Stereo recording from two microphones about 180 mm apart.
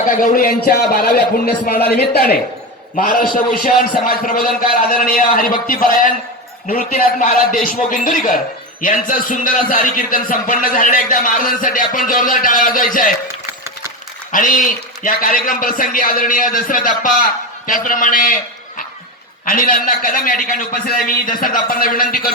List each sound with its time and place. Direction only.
0.2 s a man's voice: 50° left (ahead or behind)
14.3 s a man's voice: 50° left (ahead or behind)
19.5 s a man's voice: 50° left (ahead or behind)